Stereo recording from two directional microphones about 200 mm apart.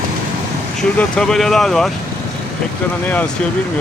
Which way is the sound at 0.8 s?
5° left (ahead or behind).